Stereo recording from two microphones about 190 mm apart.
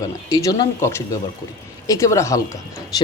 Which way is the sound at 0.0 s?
20° left (ahead or behind).